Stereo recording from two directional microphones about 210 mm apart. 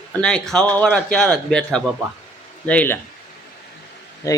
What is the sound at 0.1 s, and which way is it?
A man's voice, 5° left (ahead or behind).